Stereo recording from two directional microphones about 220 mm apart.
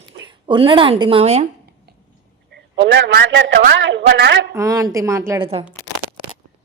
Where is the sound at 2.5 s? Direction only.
50° right (ahead or behind).